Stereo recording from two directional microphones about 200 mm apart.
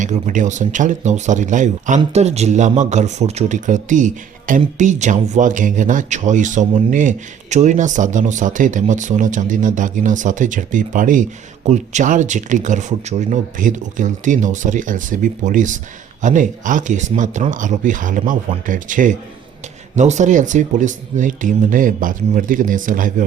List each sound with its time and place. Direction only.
0.0 s speech: 40° right (ahead or behind)